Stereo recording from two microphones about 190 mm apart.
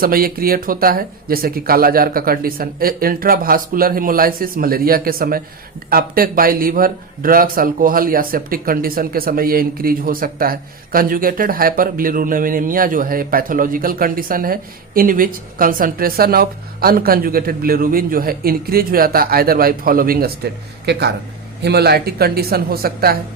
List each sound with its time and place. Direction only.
0.0 s a woman's voice: 50° right (ahead or behind)